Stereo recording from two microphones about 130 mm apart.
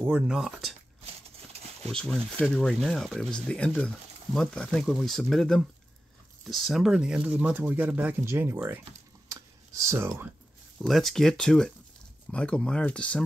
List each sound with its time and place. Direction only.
0.0 s speech: 10° right (ahead or behind)
1.9 s speech: 5° left (ahead or behind); by 8.8 s 20° right (ahead or behind)
9.3 s a sound: 25° right (ahead or behind)
10.8 s speech: centre (ahead or behind)